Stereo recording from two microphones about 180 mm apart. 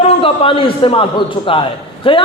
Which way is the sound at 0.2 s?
30° left (ahead or behind).